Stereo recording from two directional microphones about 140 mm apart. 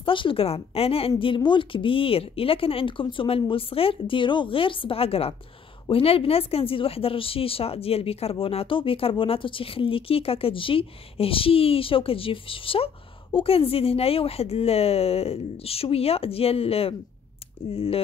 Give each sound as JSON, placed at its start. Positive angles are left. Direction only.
{"t": 0.0, "sound": "a woman's voice", "side_deg": 40}